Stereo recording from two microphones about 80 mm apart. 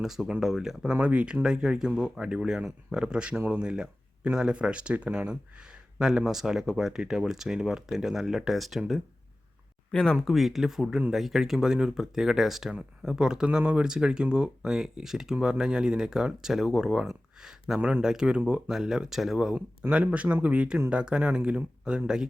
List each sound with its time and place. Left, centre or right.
0.0 s speech: centre
9.9 s speech: centre
10.3 s speech: centre
17.7 s speech: right
18.0 s speech: centre
18.7 s speech: centre